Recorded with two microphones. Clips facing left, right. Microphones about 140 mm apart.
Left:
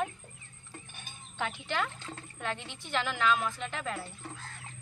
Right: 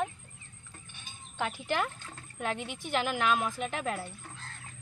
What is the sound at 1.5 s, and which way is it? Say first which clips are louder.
Speech: right 3 dB; 40° right (ahead or behind).